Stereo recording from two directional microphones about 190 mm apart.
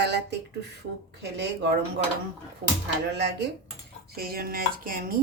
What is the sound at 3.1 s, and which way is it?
Speech, 65° right (ahead or behind).